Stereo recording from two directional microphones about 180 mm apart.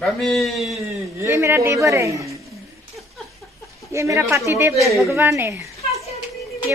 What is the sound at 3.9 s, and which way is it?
A woman's voice, 15° right (ahead or behind).